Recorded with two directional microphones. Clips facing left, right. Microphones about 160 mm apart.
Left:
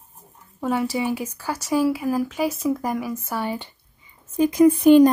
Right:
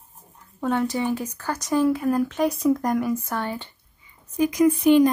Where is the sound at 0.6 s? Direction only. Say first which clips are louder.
Even; 5° left (ahead or behind).